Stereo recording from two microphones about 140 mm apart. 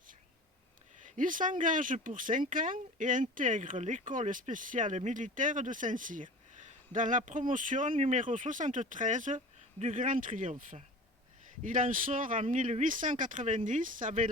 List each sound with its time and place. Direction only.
1.0 s speech: 70° right (ahead or behind)